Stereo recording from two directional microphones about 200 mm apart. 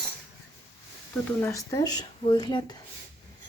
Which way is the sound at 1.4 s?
15° left (ahead or behind).